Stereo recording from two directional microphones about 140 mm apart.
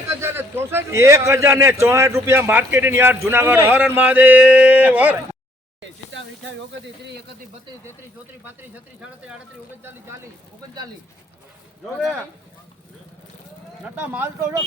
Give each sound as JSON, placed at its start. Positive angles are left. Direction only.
{"t": 0.1, "sound": "a man's voice", "side_deg": -15}
{"t": 13.8, "sound": "a man's voice", "side_deg": -10}